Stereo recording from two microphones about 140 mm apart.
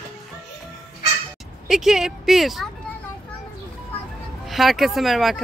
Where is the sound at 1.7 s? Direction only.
5° right (ahead or behind).